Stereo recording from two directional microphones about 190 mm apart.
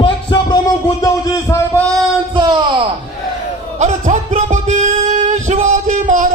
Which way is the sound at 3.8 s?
40° right (ahead or behind).